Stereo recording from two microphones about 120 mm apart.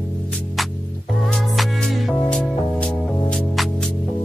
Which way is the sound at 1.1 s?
Centre (ahead or behind).